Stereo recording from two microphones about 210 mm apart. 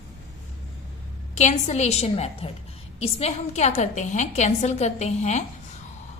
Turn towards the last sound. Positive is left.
turn(degrees=30)  # may be behind; listen again after turning